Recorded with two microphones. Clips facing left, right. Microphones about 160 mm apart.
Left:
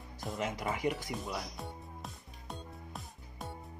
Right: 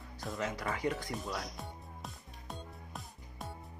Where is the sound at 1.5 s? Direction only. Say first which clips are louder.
Left 2 dB; centre (ahead or behind).